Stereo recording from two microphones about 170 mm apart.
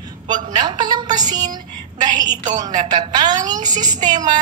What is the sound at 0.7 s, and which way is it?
A woman's voice, 25° right (ahead or behind).